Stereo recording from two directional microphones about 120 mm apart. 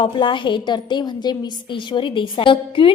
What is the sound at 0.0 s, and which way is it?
A woman's voice, 45° left (ahead or behind).